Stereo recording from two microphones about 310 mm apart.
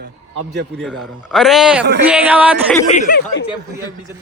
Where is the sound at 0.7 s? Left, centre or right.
Centre.